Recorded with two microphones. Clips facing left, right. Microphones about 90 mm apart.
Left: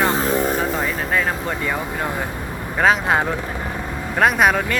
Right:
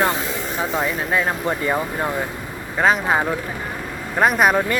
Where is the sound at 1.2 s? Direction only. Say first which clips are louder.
Right 1 dB; 20° right (ahead or behind).